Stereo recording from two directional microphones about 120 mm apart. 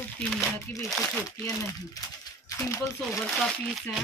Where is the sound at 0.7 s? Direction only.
25° left (ahead or behind).